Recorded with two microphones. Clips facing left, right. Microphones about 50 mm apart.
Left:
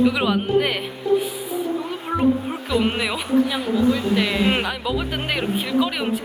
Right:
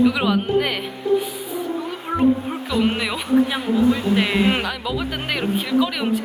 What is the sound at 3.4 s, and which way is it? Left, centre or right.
Speech, centre.